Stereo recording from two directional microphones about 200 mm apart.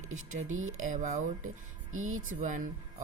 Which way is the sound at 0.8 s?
40° right (ahead or behind).